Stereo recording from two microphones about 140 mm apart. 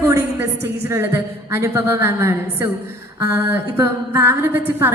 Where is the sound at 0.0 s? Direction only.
15° right (ahead or behind).